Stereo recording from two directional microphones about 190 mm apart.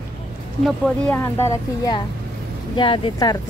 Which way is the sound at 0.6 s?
Centre (ahead or behind).